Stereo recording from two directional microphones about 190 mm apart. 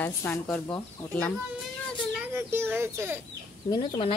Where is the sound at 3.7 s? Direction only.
20° left (ahead or behind).